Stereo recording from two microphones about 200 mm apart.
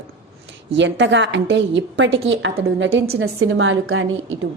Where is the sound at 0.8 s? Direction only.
65° right (ahead or behind).